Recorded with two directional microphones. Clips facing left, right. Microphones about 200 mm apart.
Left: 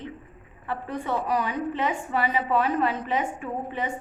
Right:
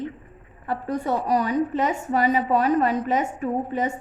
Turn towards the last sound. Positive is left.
turn(degrees=-40)  # may be behind; listen again after turning